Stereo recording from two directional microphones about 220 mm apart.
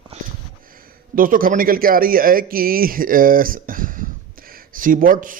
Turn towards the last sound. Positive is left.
turn(degrees=-35)  # may be behind; listen again after turning